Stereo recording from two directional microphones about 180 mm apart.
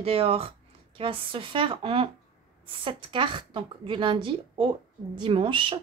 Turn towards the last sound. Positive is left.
turn(degrees=-30)  # may be behind; listen again after turning